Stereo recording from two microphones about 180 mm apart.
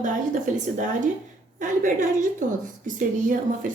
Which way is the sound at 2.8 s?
45° right (ahead or behind).